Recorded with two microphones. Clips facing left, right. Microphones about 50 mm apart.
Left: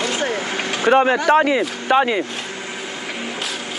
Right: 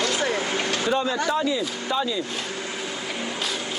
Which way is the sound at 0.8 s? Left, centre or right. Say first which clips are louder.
Left 12 dB; left.